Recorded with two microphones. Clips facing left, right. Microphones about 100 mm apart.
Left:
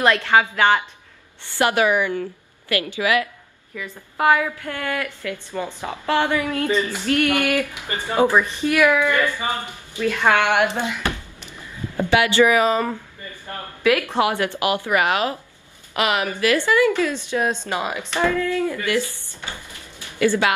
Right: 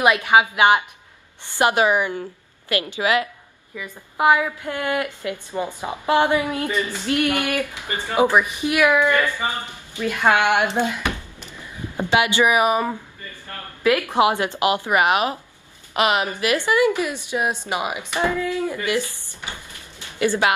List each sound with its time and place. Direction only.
0.0 s a woman's voice: 15° right (ahead or behind)
7.7 s speech: 15° left (ahead or behind)
8.1 s a woman's voice: 15° right (ahead or behind)
9.1 s speech: 15° left (ahead or behind)
9.9 s a woman's voice: 15° right (ahead or behind)
20.1 s speech: 20° right (ahead or behind)